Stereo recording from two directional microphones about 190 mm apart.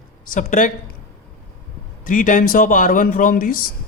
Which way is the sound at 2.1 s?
45° left (ahead or behind).